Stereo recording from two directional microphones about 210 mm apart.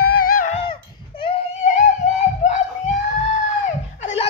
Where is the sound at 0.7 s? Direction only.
25° left (ahead or behind).